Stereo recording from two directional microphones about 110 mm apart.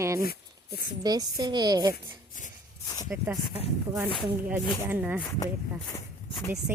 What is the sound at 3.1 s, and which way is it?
Speech, 20° right (ahead or behind).